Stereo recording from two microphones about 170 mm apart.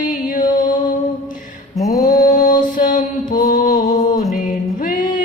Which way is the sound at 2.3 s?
45° left (ahead or behind).